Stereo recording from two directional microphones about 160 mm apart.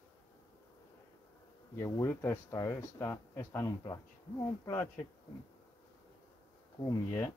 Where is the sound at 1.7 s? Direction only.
20° left (ahead or behind).